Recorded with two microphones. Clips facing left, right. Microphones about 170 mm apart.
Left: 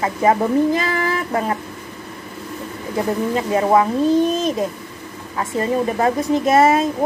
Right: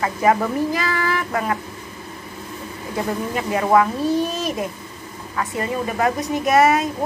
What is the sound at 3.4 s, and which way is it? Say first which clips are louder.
Speech: left 1 dB; 30° left (ahead or behind).